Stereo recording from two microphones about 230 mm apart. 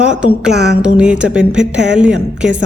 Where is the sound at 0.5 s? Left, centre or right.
Right.